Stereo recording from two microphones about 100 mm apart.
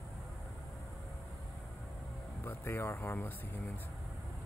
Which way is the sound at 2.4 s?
25° left (ahead or behind).